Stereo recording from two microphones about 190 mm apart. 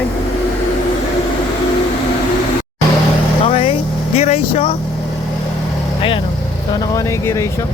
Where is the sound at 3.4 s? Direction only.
35° left (ahead or behind).